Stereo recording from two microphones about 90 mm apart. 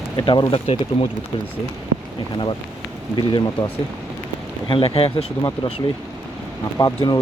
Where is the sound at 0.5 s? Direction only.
80° left.